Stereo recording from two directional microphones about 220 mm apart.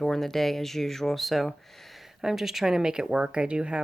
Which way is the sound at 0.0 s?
Centre (ahead or behind).